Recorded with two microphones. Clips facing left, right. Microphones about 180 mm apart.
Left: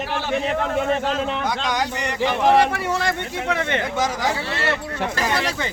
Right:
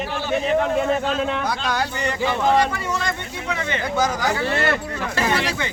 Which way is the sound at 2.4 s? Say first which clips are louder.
Left 3 dB; 65° left (ahead or behind).